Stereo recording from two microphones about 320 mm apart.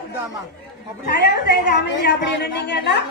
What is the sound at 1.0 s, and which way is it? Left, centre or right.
A woman's voice, left.